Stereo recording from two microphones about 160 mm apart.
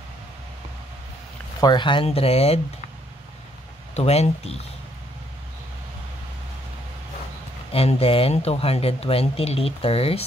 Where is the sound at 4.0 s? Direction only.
40° left (ahead or behind).